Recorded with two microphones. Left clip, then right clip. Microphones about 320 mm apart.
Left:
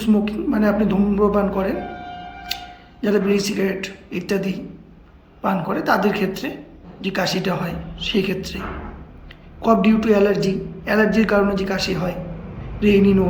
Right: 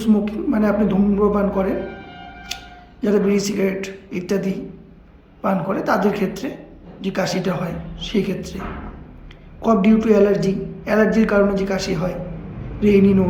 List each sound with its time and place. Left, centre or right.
0.0 s a man's voice: centre
3.0 s a man's voice: centre
9.6 s a man's voice: centre